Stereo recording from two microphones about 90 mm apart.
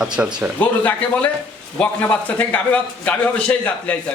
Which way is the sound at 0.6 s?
20° left (ahead or behind).